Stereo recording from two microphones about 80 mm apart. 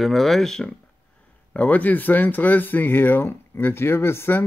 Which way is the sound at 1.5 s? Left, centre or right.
Centre.